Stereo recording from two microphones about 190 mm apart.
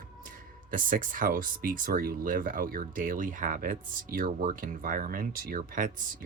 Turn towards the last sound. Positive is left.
turn(degrees=-45)  # may be behind; listen again after turning